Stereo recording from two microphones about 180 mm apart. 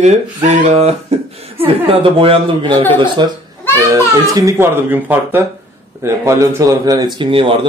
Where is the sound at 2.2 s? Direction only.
30° right (ahead or behind).